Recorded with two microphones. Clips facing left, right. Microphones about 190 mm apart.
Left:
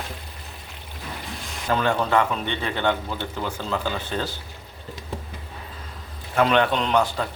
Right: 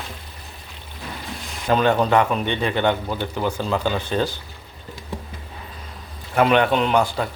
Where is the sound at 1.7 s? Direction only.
20° right (ahead or behind).